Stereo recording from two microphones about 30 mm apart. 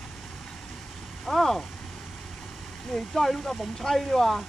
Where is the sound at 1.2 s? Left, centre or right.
Centre.